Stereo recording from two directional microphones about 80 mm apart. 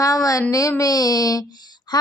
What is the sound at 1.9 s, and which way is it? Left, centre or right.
Music, left.